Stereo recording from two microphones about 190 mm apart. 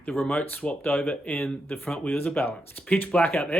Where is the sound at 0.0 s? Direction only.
5° left (ahead or behind).